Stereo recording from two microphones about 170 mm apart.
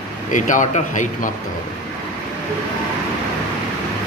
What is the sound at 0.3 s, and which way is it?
Speech, 50° left (ahead or behind).